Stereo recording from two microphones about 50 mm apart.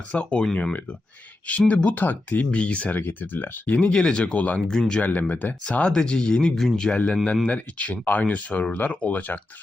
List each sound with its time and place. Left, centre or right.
0.1 s speech: left
2.0 s speech: left
3.0 s speech: left
3.8 s speech: left
4.2 s speech: left
4.7 s speech: centre
5.0 s speech: left
5.6 s speech: left